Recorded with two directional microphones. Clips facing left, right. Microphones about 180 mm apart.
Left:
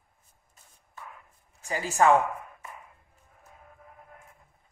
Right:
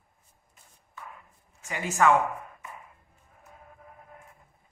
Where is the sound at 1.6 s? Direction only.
35° left (ahead or behind).